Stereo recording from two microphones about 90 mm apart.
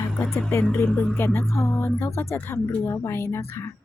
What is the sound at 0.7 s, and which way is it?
Speech, 15° left (ahead or behind).